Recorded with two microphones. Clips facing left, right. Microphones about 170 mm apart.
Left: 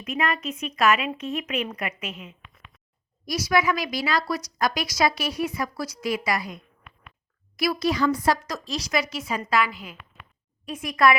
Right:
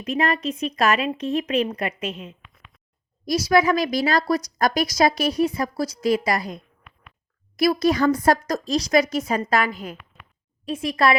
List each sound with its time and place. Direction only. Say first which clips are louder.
0.0 s speech: right 4 dB; 35° right (ahead or behind)
3.3 s a woman's voice: right 5 dB; 35° right (ahead or behind)
10.7 s a woman's voice: right 1 dB; 30° right (ahead or behind)